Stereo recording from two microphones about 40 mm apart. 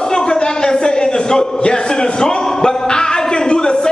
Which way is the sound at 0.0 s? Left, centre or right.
Centre.